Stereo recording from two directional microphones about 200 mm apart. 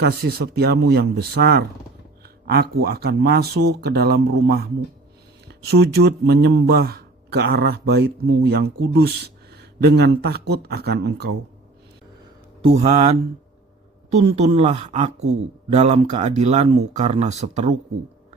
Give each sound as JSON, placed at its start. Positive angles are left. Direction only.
{"t": 0.0, "sound": "speech", "side_deg": -55}
{"t": 12.6, "sound": "speech", "side_deg": -30}